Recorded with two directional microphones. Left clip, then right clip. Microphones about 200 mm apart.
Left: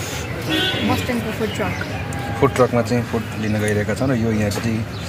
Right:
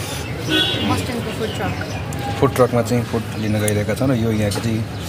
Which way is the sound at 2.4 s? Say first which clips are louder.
Even; centre (ahead or behind).